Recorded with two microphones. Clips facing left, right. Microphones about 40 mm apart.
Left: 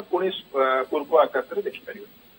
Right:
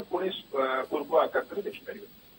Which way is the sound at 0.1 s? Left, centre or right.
Left.